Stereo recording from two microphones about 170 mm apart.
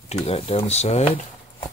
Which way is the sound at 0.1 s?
35° left (ahead or behind).